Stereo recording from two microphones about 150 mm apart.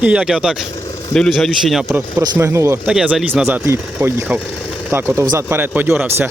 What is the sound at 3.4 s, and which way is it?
Speech, 15° right (ahead or behind).